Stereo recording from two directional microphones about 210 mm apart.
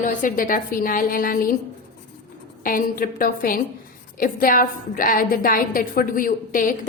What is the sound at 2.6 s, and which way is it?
A woman's voice, 40° left (ahead or behind).